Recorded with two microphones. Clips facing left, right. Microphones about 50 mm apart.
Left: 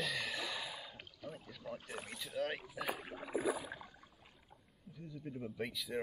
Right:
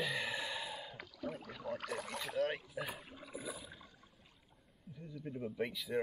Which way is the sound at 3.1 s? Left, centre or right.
Left.